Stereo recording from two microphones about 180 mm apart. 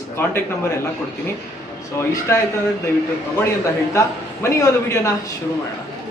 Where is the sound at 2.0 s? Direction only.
15° left (ahead or behind).